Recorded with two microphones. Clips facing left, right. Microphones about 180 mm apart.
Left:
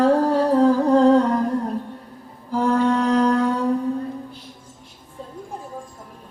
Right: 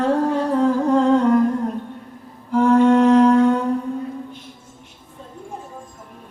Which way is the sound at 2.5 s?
35° left (ahead or behind).